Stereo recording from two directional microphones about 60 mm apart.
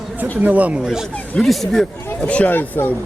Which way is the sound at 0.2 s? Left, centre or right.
Right.